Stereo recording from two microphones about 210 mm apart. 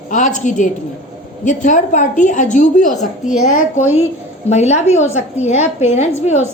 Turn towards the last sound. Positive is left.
turn(degrees=30)  # may be behind; listen again after turning